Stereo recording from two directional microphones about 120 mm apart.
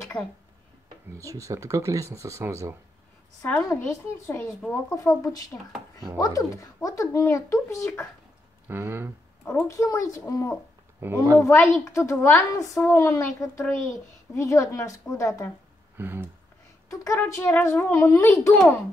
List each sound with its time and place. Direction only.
0.2 s speech: 10° left (ahead or behind)
1.1 s speech: 25° right (ahead or behind)
4.3 s speech: 20° left (ahead or behind)
8.6 s speech: 20° right (ahead or behind)
9.4 s speech: 20° left (ahead or behind)
11.0 s speech: 20° right (ahead or behind)
11.3 s speech: 20° left (ahead or behind)
16.0 s speech: 20° right (ahead or behind)
17.0 s speech: 20° left (ahead or behind)